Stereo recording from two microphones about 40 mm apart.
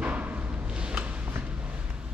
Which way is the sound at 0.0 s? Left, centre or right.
Right.